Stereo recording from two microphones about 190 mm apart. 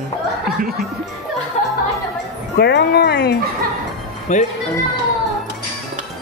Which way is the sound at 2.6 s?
60° left (ahead or behind).